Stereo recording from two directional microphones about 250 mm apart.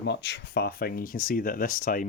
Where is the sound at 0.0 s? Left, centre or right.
Left.